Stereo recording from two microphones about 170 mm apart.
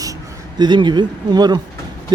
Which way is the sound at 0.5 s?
25° right (ahead or behind).